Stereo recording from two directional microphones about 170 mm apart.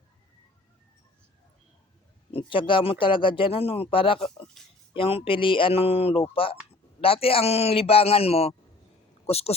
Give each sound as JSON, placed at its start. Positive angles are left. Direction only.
{"t": 2.3, "sound": "speech", "side_deg": 30}